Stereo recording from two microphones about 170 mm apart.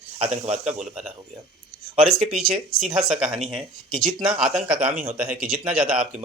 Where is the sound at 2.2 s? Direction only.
5° right (ahead or behind).